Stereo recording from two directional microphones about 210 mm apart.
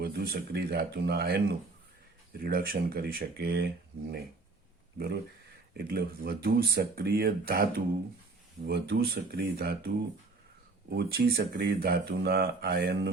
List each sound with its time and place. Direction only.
0.0 s speech: 50° right (ahead or behind)
4.9 s speech: 50° right (ahead or behind)